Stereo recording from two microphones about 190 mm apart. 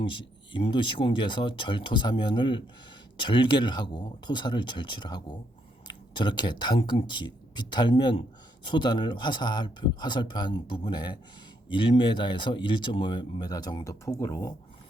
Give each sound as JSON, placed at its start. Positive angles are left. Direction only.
{"t": 0.0, "sound": "speech", "side_deg": 25}